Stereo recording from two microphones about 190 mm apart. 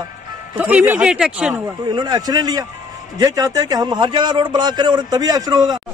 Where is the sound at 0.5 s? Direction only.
5° right (ahead or behind).